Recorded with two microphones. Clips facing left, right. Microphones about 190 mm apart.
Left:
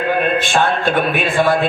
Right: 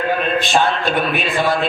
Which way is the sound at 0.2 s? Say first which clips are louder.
Left 1 dB; 50° left (ahead or behind).